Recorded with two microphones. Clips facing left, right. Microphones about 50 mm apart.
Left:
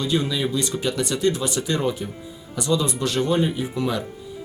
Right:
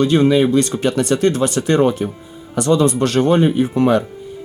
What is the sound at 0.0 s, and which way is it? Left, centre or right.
Speech, right.